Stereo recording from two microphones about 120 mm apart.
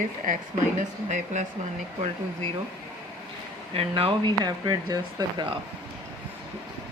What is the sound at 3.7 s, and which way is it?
Speech, 50° right (ahead or behind).